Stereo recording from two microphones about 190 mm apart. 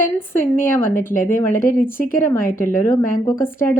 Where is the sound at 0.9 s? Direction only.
45° left (ahead or behind).